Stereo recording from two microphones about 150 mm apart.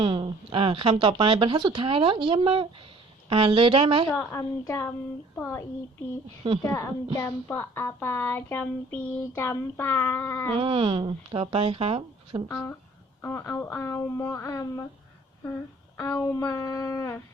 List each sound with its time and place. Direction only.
0.0 s speech: 40° right (ahead or behind)
4.1 s speech: 10° left (ahead or behind)
6.7 s speech: 20° left (ahead or behind)
10.5 s speech: 40° right (ahead or behind)
12.5 s speech: 15° left (ahead or behind)
16.0 s speech: 15° left (ahead or behind)